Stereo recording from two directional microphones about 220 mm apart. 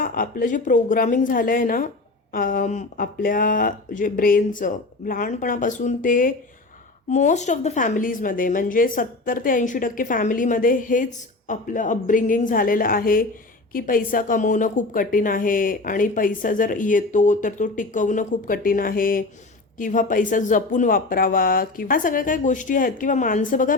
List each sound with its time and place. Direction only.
0.0 s a woman's voice: 40° left (ahead or behind)